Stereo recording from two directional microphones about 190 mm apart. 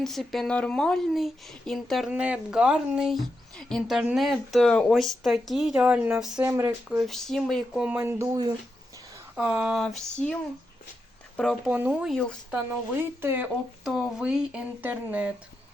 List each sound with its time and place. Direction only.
0.0 s speech: centre (ahead or behind)
6.3 s speech: 15° right (ahead or behind)
7.0 s speech: centre (ahead or behind); by 8.5 s 15° right (ahead or behind)
9.3 s speech: 5° right (ahead or behind)
11.3 s speech: centre (ahead or behind)
13.0 s speech: 10° right (ahead or behind)